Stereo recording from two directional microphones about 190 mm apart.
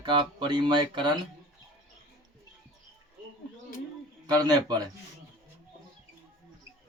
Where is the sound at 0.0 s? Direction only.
25° right (ahead or behind).